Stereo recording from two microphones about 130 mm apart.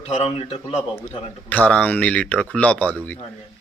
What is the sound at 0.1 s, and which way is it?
Speech, 50° left (ahead or behind).